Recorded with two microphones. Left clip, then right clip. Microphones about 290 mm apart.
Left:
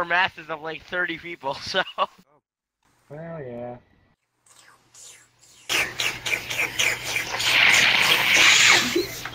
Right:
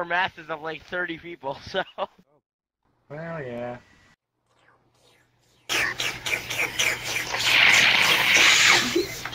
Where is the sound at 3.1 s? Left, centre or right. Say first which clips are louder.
Right 2 dB; right.